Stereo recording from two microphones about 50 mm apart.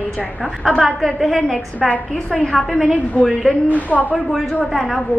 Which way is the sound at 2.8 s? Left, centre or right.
Right.